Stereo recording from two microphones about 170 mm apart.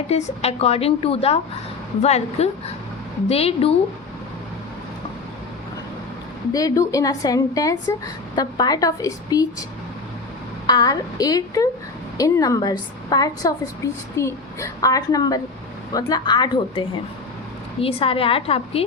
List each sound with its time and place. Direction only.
0.1 s speech: 40° left (ahead or behind)
6.5 s a woman's voice: 20° left (ahead or behind)
10.7 s a woman's voice: 20° left (ahead or behind)